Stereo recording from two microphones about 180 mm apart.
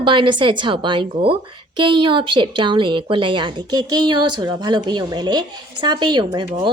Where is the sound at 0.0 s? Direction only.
25° right (ahead or behind).